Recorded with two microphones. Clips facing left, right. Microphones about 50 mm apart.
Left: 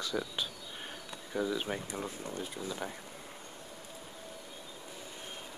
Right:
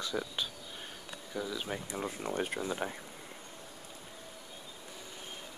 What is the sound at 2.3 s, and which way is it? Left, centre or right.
Speech, right.